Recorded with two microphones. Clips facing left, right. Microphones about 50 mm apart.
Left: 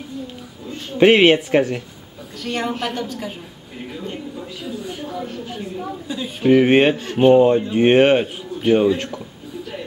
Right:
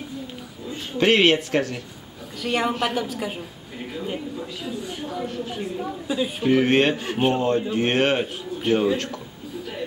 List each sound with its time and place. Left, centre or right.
0.9 s speech: centre
2.4 s a woman's voice: centre
6.4 s speech: centre
7.0 s a woman's voice: centre
7.3 s speech: centre